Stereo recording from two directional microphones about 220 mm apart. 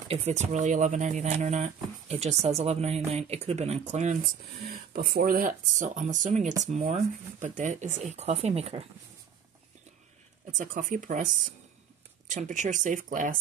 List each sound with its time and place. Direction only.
0.1 s speech: 30° right (ahead or behind)
4.6 s speech: 45° right (ahead or behind); by 8.8 s 30° right (ahead or behind)
10.6 s speech: 35° right (ahead or behind)
12.3 s speech: 35° right (ahead or behind)